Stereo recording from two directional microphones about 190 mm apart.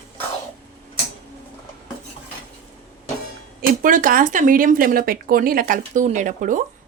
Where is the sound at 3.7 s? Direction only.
45° right (ahead or behind).